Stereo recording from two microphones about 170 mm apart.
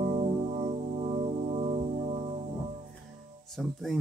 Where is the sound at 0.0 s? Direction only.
35° right (ahead or behind).